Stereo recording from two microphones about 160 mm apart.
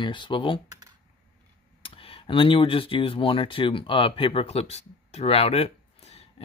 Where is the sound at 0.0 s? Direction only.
30° left (ahead or behind).